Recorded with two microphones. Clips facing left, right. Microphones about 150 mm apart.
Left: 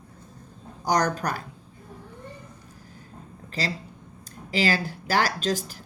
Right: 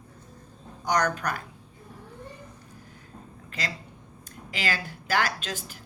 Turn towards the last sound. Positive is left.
turn(degrees=40)  # may be behind; listen again after turning